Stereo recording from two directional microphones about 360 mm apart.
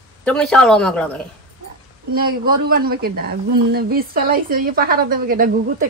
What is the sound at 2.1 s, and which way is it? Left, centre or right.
A woman's voice, right.